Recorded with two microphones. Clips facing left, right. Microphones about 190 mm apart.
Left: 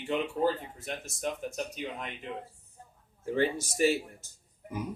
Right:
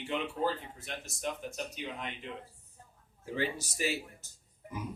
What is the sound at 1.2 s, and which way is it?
Speech, 45° left (ahead or behind).